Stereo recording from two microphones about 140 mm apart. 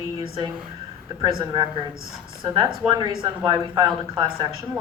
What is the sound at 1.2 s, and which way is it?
A woman's voice, 35° right (ahead or behind).